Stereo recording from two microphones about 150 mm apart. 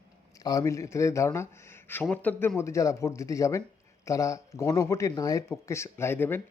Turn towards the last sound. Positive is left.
turn(degrees=15)  # may be behind; listen again after turning